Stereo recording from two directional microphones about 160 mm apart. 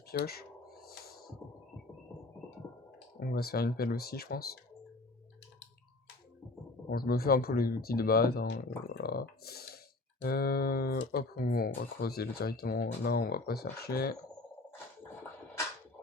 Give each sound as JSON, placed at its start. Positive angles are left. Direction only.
{"t": 0.1, "sound": "a sound", "side_deg": 75}
{"t": 3.2, "sound": "speech", "side_deg": 70}
{"t": 6.9, "sound": "speech", "side_deg": 70}